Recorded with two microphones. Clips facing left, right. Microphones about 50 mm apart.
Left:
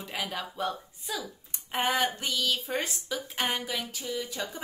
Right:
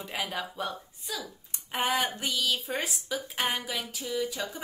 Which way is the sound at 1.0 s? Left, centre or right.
Centre.